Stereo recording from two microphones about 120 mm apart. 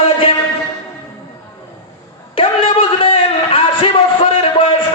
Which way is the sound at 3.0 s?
50° left (ahead or behind).